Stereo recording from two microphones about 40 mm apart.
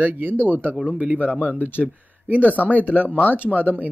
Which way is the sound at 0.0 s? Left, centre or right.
Right.